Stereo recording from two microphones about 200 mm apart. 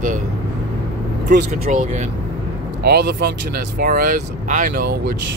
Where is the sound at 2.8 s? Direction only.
55° right (ahead or behind).